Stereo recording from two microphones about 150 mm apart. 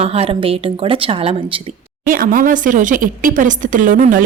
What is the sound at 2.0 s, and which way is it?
Speech, 70° right (ahead or behind).